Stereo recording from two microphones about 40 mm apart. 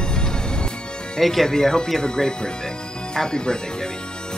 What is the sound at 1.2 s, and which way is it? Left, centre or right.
A woman's voice, centre.